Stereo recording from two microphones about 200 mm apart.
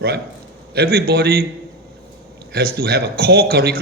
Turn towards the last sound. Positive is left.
turn(degrees=-50)  # may be behind; listen again after turning